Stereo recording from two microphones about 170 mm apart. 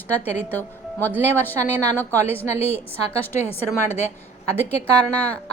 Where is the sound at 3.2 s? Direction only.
10° left (ahead or behind).